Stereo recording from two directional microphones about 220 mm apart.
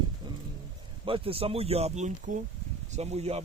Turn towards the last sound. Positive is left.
turn(degrees=-30)  # may be behind; listen again after turning